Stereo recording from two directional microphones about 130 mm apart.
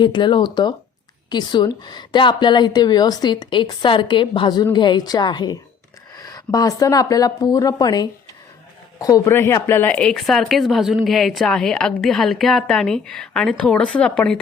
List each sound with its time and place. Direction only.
0.0 s a woman's voice: 35° left (ahead or behind); by 14.3 s 10° left (ahead or behind)